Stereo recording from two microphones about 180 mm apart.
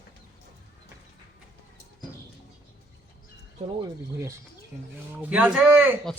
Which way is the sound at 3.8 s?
15° right (ahead or behind).